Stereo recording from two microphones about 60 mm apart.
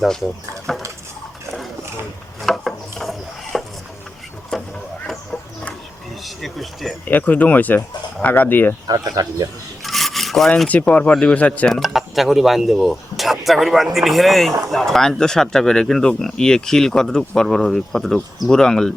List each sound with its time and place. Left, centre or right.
0.7 s speech: centre
2.4 s wood: centre
4.5 s a sound: centre
6.2 s speech: centre
7.0 s speech: left
8.9 s speech: right
9.8 s rub: centre
10.7 s speech: left
11.7 s speech: centre